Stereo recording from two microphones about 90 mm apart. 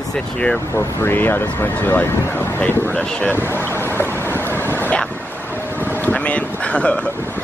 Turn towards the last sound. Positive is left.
turn(degrees=15)  # may be behind; listen again after turning